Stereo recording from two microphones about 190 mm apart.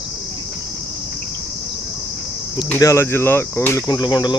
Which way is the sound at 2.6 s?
15° left (ahead or behind).